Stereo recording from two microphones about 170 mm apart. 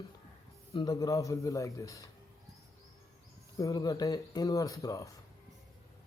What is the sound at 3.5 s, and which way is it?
Speech, 20° left (ahead or behind).